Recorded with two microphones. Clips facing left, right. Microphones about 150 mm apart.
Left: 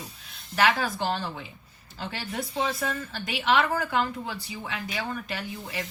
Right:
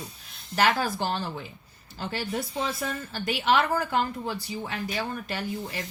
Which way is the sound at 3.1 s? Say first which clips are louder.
Right 1 dB; 40° right (ahead or behind).